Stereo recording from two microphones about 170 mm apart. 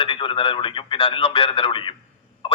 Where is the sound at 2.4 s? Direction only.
30° left (ahead or behind).